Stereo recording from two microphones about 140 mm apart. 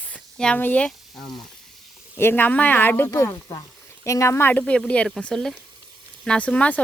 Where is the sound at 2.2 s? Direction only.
15° left (ahead or behind).